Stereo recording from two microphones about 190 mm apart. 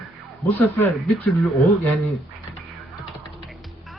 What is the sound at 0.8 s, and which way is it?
Speech, 10° left (ahead or behind).